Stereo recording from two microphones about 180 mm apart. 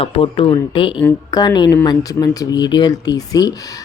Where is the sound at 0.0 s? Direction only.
30° left (ahead or behind).